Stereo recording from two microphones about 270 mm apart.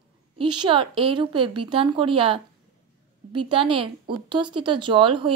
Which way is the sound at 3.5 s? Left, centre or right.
Centre.